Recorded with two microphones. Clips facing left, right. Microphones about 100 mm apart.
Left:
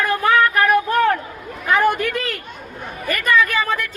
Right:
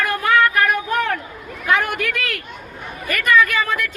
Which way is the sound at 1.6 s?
35° left (ahead or behind).